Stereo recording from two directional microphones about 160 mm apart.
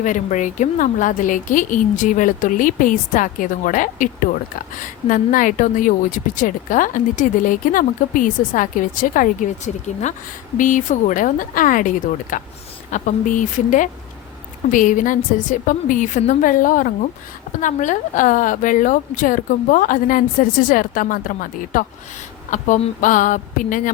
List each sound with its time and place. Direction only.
0.0 s a woman's voice: 50° left (ahead or behind)